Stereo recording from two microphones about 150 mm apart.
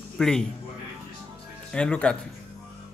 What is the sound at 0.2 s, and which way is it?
Speech, 5° left (ahead or behind).